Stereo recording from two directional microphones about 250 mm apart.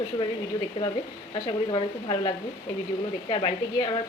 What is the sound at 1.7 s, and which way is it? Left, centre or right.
Speech, centre.